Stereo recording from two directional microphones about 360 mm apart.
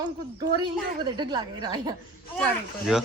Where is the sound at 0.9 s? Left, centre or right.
Centre.